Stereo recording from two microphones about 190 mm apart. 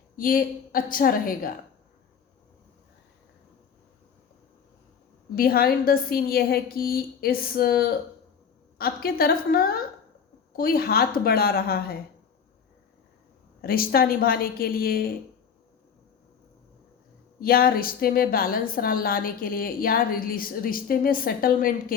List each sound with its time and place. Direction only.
0.2 s a woman's voice: 50° left (ahead or behind)
5.3 s a woman's voice: 50° left (ahead or behind)
13.6 s a woman's voice: 50° left (ahead or behind)
17.4 s a woman's voice: 50° left (ahead or behind)